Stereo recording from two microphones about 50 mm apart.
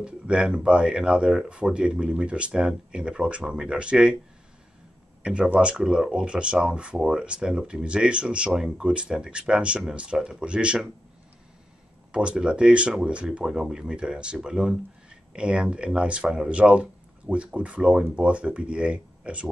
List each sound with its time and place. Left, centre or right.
0.0 s speech: centre
5.2 s speech: centre
12.1 s speech: centre